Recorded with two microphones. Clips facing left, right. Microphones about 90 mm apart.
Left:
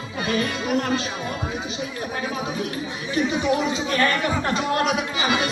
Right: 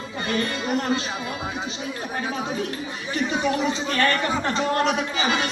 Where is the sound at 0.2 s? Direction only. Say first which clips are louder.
Left 2 dB; 5° left (ahead or behind).